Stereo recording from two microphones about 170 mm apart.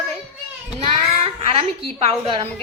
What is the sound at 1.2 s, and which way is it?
A woman's voice, 35° right (ahead or behind).